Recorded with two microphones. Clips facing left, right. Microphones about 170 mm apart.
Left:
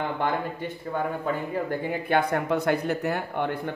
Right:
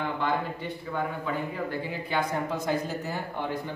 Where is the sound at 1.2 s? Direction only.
50° left (ahead or behind).